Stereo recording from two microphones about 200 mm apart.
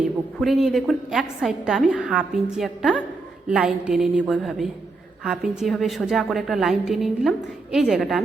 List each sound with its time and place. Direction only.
0.0 s a woman's voice: centre (ahead or behind)